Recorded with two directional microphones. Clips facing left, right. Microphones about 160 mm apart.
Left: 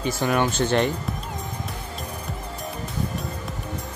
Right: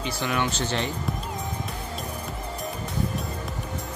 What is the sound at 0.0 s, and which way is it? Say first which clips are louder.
Speech: left 5 dB; 45° left (ahead or behind).